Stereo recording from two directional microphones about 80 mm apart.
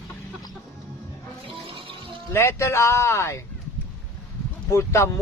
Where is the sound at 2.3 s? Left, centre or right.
Left.